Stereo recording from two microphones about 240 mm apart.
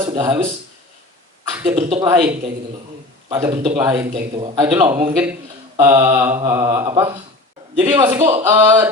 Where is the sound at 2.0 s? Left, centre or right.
Centre.